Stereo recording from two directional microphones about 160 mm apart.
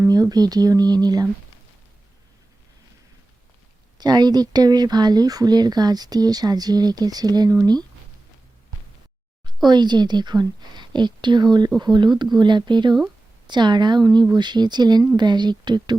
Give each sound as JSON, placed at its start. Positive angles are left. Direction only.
{"t": 0.0, "sound": "speech", "side_deg": -25}
{"t": 3.9, "sound": "speech", "side_deg": -25}
{"t": 9.6, "sound": "speech", "side_deg": -25}